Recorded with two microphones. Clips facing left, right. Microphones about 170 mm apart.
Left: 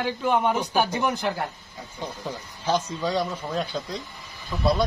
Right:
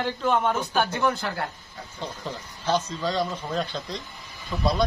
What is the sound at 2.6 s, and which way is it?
A man's voice, 10° left (ahead or behind).